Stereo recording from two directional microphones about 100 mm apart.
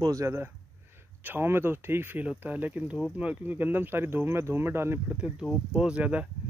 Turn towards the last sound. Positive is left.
turn(degrees=-15)  # may be behind; listen again after turning